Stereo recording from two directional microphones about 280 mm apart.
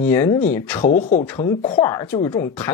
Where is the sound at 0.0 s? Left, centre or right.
Centre.